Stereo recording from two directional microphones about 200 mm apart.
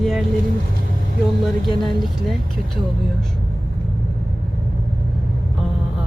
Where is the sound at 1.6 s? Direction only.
Centre (ahead or behind).